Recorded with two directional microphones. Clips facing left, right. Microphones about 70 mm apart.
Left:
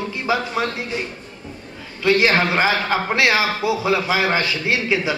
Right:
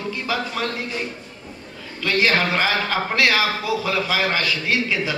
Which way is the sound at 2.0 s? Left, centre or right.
Left.